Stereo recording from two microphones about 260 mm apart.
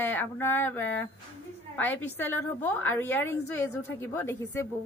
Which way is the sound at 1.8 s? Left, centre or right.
Centre.